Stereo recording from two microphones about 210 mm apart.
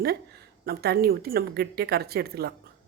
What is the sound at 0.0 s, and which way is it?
A woman's voice, 45° right (ahead or behind).